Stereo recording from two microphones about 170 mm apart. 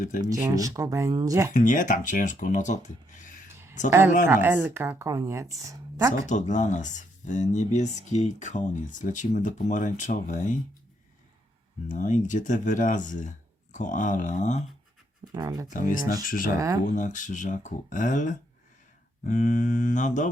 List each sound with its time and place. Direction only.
0.3 s speech: 20° right (ahead or behind)
1.5 s speech: 50° left (ahead or behind)
3.8 s a woman's voice: 15° right (ahead or behind)
6.2 s speech: 45° left (ahead or behind)
11.9 s speech: 50° left (ahead or behind)
15.3 s speech: 20° right (ahead or behind)
15.7 s speech: 55° left (ahead or behind)
16.6 s speech: 20° right (ahead or behind)
16.8 s speech: 50° left (ahead or behind)